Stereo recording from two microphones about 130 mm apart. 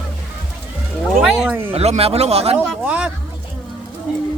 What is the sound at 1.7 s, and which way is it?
Speech, 50° right (ahead or behind).